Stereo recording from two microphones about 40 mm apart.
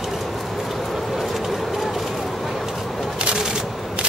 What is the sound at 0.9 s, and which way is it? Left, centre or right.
Vehicle, centre.